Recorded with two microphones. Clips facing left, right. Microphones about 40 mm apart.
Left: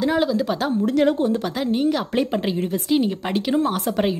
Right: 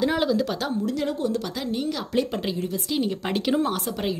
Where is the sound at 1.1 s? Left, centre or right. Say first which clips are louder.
Left 5 dB; left.